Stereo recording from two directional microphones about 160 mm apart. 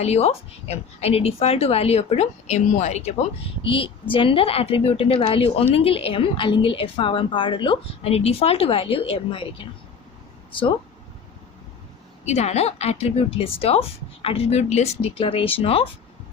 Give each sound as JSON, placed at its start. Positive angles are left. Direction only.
{"t": 0.0, "sound": "a woman's voice", "side_deg": 40}
{"t": 3.6, "sound": "a woman's voice", "side_deg": 35}
{"t": 12.2, "sound": "a woman's voice", "side_deg": 45}